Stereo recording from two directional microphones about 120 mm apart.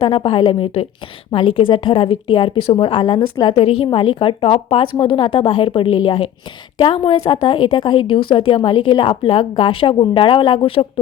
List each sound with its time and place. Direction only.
0.0 s speech: 50° left (ahead or behind)
3.5 s speech: 50° left (ahead or behind)